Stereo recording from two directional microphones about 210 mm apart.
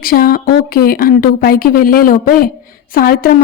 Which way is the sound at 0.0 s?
45° left (ahead or behind).